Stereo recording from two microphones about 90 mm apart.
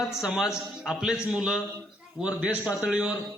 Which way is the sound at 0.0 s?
5° right (ahead or behind).